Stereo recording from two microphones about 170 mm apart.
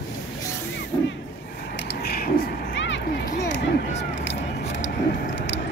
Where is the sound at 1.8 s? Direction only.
75° left (ahead or behind).